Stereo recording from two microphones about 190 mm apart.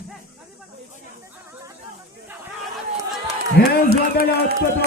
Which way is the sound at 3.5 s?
55° left (ahead or behind).